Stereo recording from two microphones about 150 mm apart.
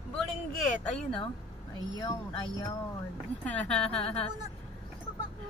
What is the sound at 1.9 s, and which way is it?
Speech, 30° left (ahead or behind).